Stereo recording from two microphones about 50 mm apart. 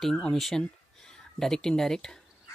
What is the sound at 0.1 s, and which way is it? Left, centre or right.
Speech, centre.